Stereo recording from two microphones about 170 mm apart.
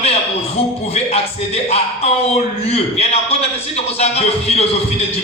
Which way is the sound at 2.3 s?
35° left (ahead or behind).